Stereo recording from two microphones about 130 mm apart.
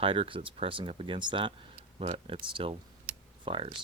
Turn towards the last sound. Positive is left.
turn(degrees=-45)  # may be behind; listen again after turning